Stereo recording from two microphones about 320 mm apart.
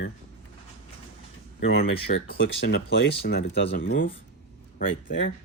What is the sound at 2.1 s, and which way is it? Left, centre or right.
Speech, left.